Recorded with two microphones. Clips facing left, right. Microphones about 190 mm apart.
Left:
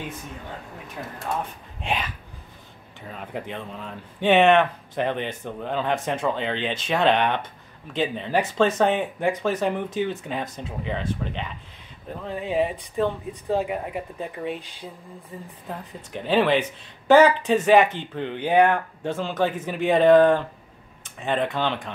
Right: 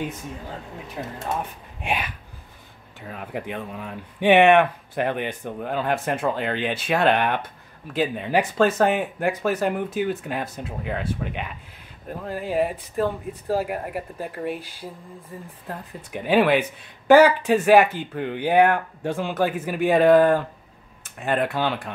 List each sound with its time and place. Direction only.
1.0 s speech: 20° right (ahead or behind)
1.3 s speech: 10° right (ahead or behind)
16.1 s speech: 10° right (ahead or behind)